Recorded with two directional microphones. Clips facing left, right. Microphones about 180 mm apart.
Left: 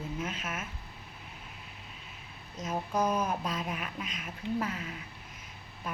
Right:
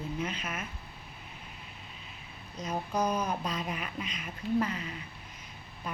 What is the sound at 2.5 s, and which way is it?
Speech, centre (ahead or behind).